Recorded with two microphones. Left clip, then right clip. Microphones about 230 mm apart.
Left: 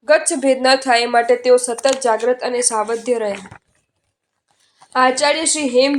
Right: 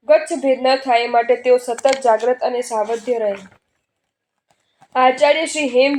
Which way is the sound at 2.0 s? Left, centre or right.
Left.